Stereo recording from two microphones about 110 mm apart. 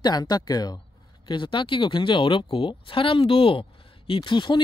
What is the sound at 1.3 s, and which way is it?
Speech, 50° left (ahead or behind).